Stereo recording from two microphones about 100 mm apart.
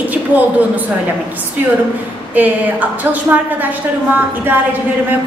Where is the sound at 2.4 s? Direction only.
15° right (ahead or behind).